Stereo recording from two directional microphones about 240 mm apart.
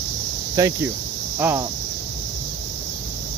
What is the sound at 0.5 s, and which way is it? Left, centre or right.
Speech, centre.